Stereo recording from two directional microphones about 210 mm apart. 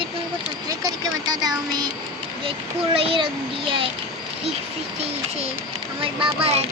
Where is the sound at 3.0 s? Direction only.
25° right (ahead or behind).